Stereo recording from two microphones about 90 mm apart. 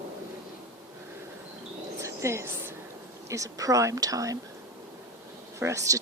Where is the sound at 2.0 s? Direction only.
35° right (ahead or behind).